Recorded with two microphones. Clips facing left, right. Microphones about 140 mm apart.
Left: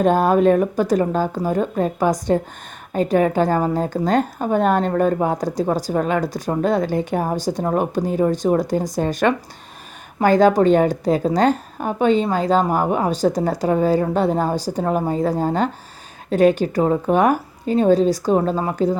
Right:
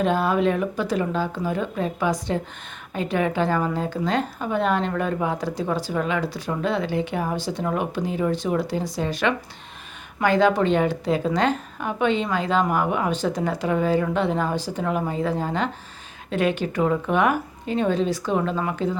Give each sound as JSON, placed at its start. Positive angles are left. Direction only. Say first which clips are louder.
{"t": 0.0, "sound": "a woman's voice", "louder": "left 6 dB", "side_deg": 45}